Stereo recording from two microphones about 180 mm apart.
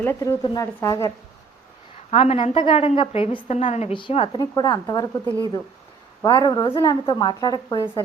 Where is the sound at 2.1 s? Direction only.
35° left (ahead or behind).